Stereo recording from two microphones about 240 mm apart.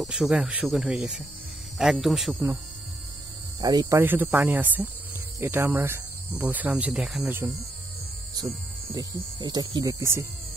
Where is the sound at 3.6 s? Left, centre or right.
Centre.